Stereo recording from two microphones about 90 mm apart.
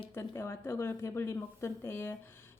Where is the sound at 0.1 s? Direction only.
25° left (ahead or behind).